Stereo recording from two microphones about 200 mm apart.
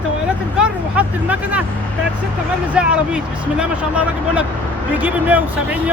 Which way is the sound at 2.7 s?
5° right (ahead or behind).